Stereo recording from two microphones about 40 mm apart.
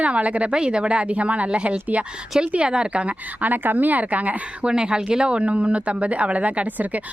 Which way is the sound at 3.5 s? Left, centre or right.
Right.